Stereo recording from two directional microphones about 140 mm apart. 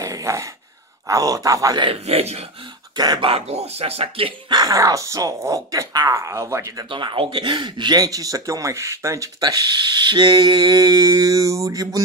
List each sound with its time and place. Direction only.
0.0 s a sound: 20° right (ahead or behind)
1.0 s speech: 25° right (ahead or behind)
1.9 s speech: 45° right (ahead or behind)
3.0 s speech: 35° right (ahead or behind)
4.5 s speech: 25° right (ahead or behind)
6.9 s speech: 35° right (ahead or behind)